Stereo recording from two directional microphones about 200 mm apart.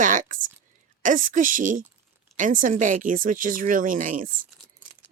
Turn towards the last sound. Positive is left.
turn(degrees=-40)  # may be behind; listen again after turning